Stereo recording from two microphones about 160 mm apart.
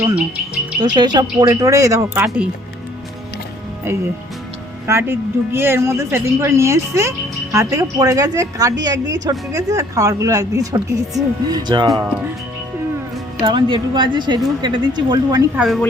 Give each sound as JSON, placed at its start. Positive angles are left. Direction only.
{"t": 0.0, "sound": "a woman's voice", "side_deg": -10}
{"t": 0.8, "sound": "a woman's voice", "side_deg": -25}
{"t": 4.9, "sound": "a woman's voice", "side_deg": -15}
{"t": 13.4, "sound": "a woman's voice", "side_deg": -30}
{"t": 15.5, "sound": "a woman's voice", "side_deg": -5}